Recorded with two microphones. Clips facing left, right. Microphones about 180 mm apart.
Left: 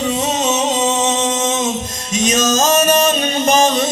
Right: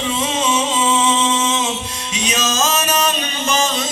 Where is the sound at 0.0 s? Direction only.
45° left (ahead or behind).